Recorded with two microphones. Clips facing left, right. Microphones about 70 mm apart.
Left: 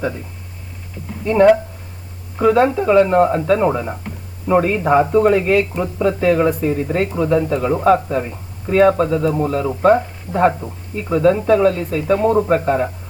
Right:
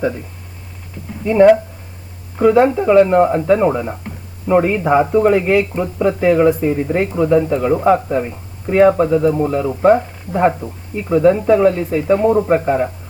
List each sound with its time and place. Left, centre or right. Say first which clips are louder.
1.2 s speech: right 2 dB; centre